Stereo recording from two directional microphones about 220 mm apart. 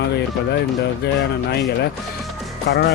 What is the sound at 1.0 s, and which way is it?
Speech, 50° left (ahead or behind).